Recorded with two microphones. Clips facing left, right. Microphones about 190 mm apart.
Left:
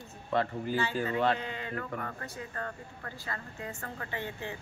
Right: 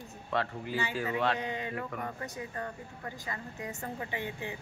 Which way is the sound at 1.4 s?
15° right (ahead or behind).